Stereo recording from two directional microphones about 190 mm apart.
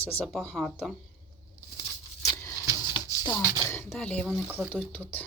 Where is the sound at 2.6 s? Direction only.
15° right (ahead or behind).